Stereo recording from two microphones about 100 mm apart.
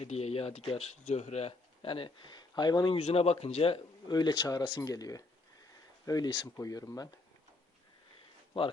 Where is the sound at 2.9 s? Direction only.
75° left (ahead or behind).